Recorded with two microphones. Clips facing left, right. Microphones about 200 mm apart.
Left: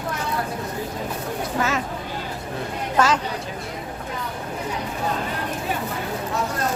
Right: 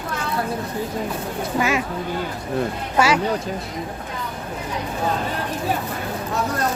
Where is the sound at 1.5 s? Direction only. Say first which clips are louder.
Right 3 dB; 10° right (ahead or behind).